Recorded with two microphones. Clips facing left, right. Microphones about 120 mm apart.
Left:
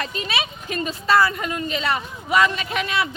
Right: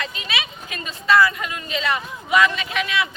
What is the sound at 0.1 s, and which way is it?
A woman's voice, 40° left (ahead or behind).